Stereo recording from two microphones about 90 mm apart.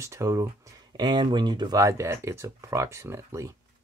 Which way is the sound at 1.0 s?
55° right (ahead or behind).